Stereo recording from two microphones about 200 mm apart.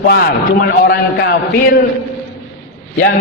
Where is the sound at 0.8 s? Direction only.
55° left (ahead or behind).